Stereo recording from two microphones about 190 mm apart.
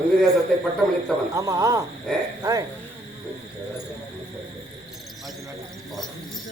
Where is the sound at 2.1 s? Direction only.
5° left (ahead or behind).